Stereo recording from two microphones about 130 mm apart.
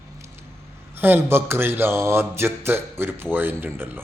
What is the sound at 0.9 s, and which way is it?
A man's voice, 15° right (ahead or behind).